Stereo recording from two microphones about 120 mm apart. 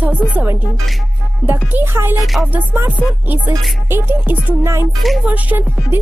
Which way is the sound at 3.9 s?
20° right (ahead or behind).